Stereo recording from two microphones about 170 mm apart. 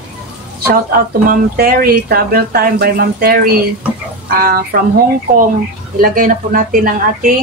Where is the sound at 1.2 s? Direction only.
60° right (ahead or behind).